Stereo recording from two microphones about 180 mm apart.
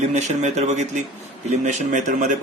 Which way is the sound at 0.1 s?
40° right (ahead or behind).